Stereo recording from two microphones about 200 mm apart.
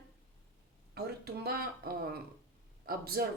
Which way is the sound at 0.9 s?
50° right (ahead or behind).